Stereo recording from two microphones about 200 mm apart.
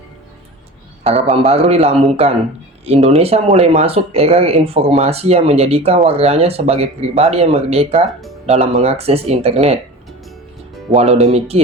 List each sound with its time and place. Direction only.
1.0 s speech: 30° right (ahead or behind)
10.9 s speech: 30° right (ahead or behind)